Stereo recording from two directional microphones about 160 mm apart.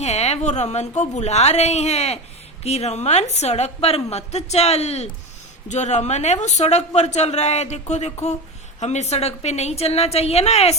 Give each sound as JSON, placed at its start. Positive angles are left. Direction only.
{"t": 0.0, "sound": "a woman's voice", "side_deg": 45}